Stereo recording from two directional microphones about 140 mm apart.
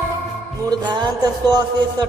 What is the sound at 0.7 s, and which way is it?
Music, 30° right (ahead or behind).